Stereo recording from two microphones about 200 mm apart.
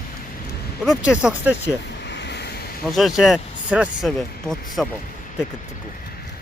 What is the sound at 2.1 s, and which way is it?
Vehicle, 60° left (ahead or behind).